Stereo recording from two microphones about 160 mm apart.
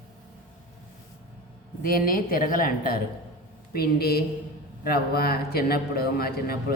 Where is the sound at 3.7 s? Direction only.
75° left (ahead or behind).